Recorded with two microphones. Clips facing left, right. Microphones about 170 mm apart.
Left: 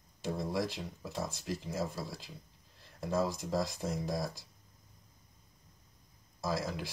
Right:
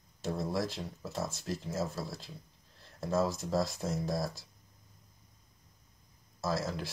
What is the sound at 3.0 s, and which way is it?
Speech, 15° left (ahead or behind).